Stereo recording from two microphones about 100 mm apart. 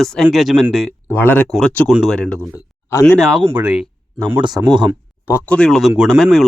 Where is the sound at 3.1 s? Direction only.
Centre (ahead or behind).